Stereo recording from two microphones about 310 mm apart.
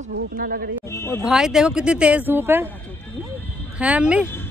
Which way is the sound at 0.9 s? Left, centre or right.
Centre.